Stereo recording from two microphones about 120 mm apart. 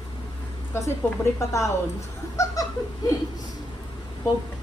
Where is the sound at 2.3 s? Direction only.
25° left (ahead or behind).